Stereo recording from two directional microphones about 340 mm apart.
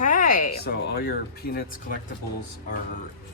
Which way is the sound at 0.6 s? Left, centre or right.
Left.